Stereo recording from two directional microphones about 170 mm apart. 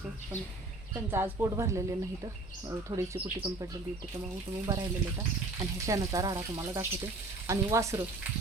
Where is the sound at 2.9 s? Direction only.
25° right (ahead or behind).